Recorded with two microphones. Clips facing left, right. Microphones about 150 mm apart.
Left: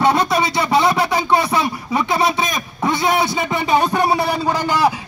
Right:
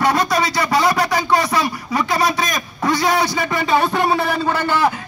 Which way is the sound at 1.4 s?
15° left (ahead or behind).